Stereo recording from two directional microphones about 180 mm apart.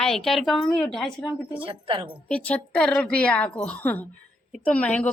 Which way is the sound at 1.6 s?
30° right (ahead or behind).